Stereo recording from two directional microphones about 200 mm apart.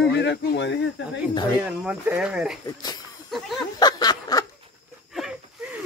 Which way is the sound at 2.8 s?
20° left (ahead or behind).